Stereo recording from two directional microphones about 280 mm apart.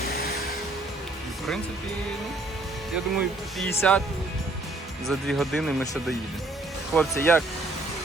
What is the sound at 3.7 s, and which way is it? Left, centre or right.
Speech, centre.